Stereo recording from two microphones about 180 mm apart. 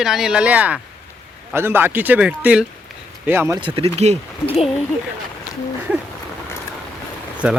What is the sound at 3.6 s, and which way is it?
Speech, 30° right (ahead or behind).